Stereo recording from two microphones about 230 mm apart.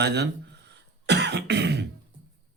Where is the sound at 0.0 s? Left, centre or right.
Right.